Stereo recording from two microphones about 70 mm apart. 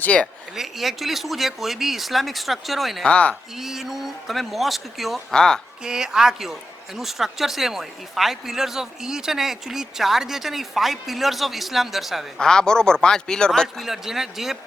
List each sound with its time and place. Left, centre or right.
0.0 s speech: centre
0.5 s a woman's voice: centre
3.0 s speech: centre
3.5 s a woman's voice: centre
5.8 s a woman's voice: centre
12.4 s speech: centre
13.8 s a woman's voice: centre